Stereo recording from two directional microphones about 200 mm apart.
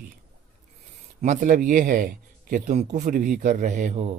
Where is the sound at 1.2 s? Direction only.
40° right (ahead or behind).